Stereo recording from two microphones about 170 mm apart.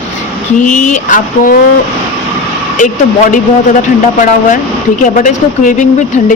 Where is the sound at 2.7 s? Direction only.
50° left (ahead or behind).